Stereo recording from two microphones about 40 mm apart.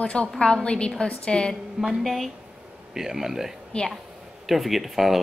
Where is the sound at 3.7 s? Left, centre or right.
Left.